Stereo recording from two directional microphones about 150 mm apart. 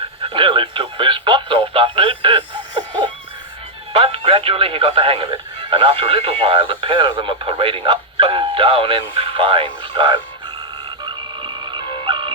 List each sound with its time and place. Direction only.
0.2 s radio: 35° right (ahead or behind)
3.9 s speech: 35° right (ahead or behind)
11.0 s a sound: 30° right (ahead or behind)